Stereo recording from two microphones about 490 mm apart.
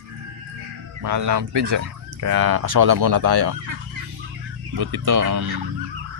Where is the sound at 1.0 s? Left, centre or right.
Right.